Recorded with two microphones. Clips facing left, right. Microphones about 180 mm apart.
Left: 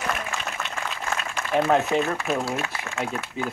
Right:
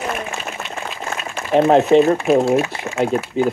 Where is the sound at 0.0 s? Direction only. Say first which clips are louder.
Right 4 dB; 30° right (ahead or behind).